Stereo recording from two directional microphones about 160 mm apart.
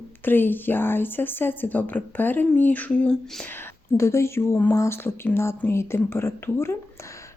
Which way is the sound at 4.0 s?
15° left (ahead or behind).